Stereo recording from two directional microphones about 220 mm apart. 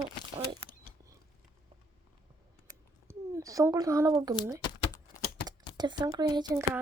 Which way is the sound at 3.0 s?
15° right (ahead or behind).